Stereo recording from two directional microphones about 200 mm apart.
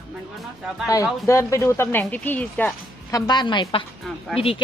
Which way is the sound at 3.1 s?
20° left (ahead or behind).